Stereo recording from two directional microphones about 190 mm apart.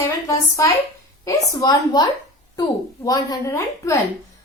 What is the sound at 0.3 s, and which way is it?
A woman's voice, 15° left (ahead or behind).